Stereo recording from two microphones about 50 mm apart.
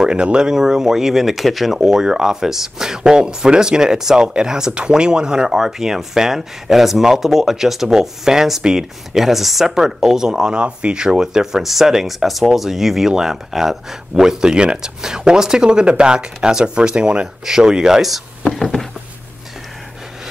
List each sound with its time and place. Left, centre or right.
0.0 s speech: centre
10.6 s speech: right; by 18.2 s centre
18.5 s a sound: centre